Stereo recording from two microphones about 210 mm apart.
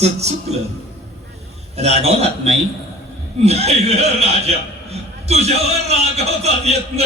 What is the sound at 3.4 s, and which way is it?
A man's voice, 30° right (ahead or behind).